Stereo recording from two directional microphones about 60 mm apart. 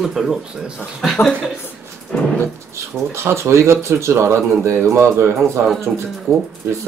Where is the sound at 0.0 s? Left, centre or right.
Centre.